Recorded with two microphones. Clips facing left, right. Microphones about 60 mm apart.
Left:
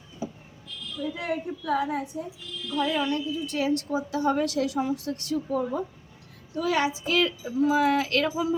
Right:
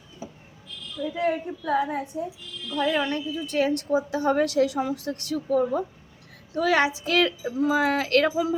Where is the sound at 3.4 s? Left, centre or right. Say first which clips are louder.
Right 2 dB; right.